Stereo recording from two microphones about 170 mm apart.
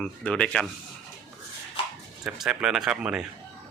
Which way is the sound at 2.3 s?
5° right (ahead or behind).